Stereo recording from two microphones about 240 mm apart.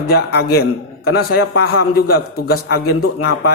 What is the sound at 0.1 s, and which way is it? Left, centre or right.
A man's voice, left.